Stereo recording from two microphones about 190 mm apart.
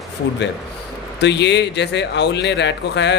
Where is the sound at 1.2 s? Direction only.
65° left (ahead or behind).